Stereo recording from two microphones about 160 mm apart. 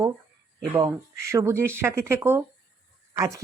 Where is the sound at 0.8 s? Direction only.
20° right (ahead or behind).